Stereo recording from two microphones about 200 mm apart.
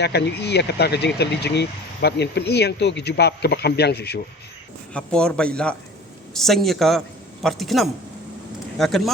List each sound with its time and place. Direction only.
0.0 s speech: 55° left (ahead or behind)
4.9 s a man's voice: 5° left (ahead or behind)